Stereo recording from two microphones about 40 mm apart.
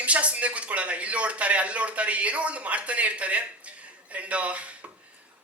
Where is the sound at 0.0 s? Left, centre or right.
Right.